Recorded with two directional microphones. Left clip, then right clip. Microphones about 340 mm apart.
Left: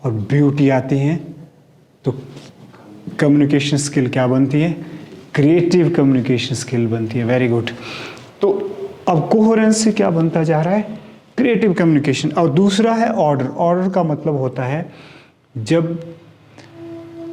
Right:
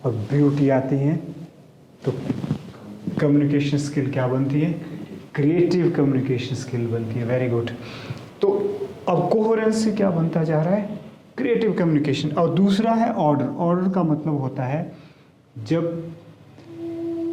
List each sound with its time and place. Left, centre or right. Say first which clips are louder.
0.0 s speech: left 4 dB; left
3.2 s speech: left 6 dB; left